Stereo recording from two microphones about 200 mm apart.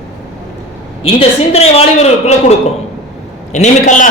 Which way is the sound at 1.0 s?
30° left (ahead or behind).